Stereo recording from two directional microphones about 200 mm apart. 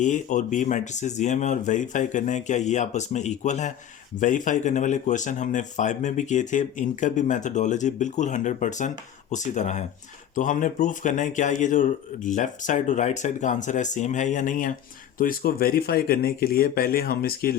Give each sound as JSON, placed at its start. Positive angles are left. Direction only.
{"t": 0.0, "sound": "speech", "side_deg": 40}